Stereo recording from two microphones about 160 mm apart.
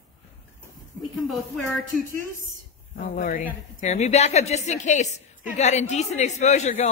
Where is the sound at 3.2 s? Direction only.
55° left (ahead or behind).